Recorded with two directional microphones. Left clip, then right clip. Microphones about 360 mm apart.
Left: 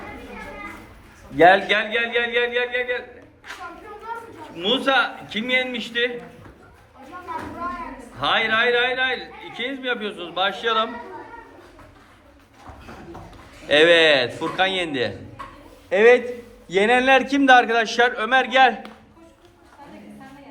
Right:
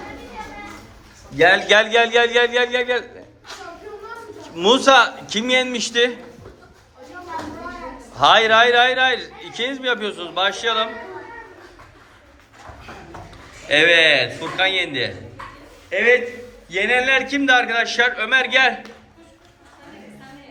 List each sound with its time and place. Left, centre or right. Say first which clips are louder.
1.4 s speech: right 1 dB; centre
4.5 s speech: right 7 dB; centre
8.2 s a man's voice: right 7 dB; centre
9.2 s a sound: right 2 dB; right
9.6 s a man's voice: right 4 dB; centre
13.7 s a man's voice: right 1 dB; centre